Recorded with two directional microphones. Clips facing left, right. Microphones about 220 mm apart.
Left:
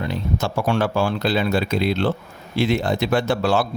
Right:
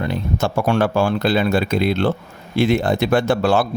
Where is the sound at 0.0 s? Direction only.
55° right (ahead or behind).